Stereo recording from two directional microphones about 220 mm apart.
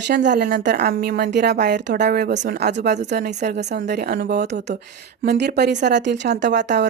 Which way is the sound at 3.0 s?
40° right (ahead or behind).